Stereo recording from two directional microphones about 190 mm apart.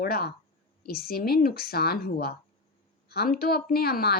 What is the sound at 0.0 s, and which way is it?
A woman's voice, 55° left (ahead or behind).